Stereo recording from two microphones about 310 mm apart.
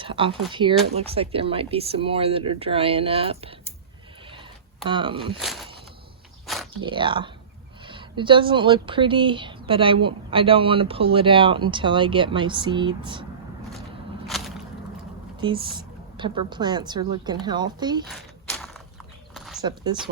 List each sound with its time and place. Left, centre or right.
0.0 s speech: centre
4.9 s speech: centre
5.4 s speech: centre
6.8 s speech: centre
14.3 s a sound: centre
15.4 s speech: centre
18.0 s a sound: centre
19.6 s speech: centre